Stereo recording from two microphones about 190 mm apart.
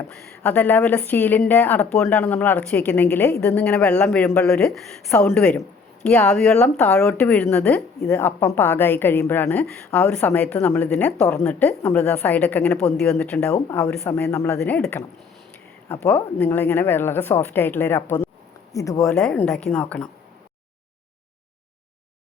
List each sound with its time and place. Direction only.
0.1 s a woman's voice: 5° left (ahead or behind)
14.0 s speech: 15° left (ahead or behind)
19.2 s a woman's voice: 5° left (ahead or behind)